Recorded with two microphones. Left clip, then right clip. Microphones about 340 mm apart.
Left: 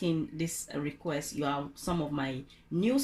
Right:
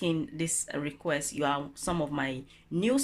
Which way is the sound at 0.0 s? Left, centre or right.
Right.